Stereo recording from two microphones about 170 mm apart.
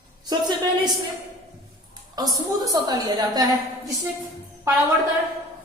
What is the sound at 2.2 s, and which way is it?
A woman's voice, 20° right (ahead or behind).